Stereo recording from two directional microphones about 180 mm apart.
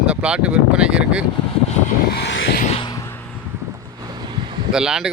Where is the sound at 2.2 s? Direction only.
70° left (ahead or behind).